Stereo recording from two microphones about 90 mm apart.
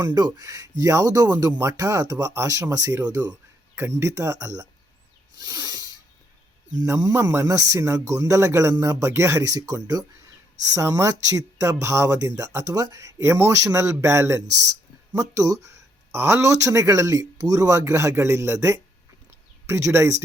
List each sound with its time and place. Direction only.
0.0 s speech: 50° right (ahead or behind)
3.8 s speech: 30° right (ahead or behind)
5.4 s a sound: 50° right (ahead or behind)
7.1 s speech: 25° right (ahead or behind)
7.4 s speech: 40° right (ahead or behind)
10.8 s speech: 30° right (ahead or behind)